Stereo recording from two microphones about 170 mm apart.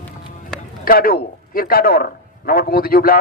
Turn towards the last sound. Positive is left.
turn(degrees=60)  # may be behind; listen again after turning